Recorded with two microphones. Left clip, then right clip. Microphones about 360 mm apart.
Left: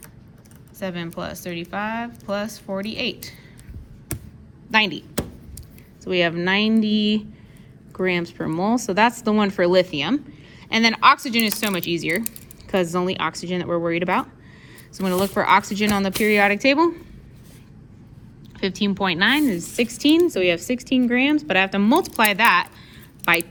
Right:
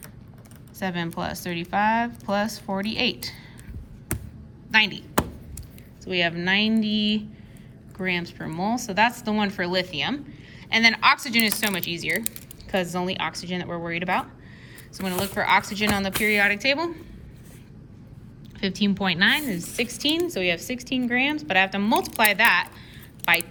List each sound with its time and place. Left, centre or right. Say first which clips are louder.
0.8 s speech: even; centre
4.7 s speech: left 1 dB; centre
6.1 s speech: left 3 dB; centre
18.6 s speech: left 3 dB; centre